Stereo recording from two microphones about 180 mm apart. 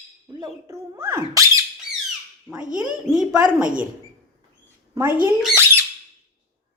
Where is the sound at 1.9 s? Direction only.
50° left (ahead or behind).